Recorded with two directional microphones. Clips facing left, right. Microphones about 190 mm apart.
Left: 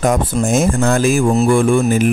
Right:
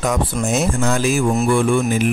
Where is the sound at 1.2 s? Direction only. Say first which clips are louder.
Left 4 dB; 35° left (ahead or behind).